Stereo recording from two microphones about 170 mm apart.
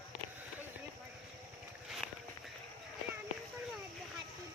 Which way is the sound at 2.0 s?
Centre (ahead or behind).